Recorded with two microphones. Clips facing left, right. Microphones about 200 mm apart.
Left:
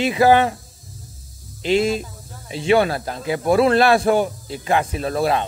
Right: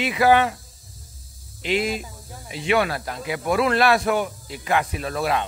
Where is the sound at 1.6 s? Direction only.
30° left (ahead or behind).